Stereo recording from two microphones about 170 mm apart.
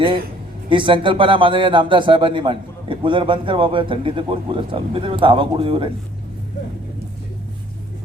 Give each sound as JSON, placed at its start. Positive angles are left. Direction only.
{"t": 0.7, "sound": "a man's voice", "side_deg": -30}